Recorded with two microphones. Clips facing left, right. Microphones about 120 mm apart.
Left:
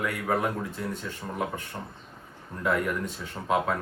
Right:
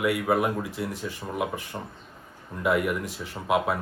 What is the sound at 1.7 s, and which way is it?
Speech, 15° right (ahead or behind).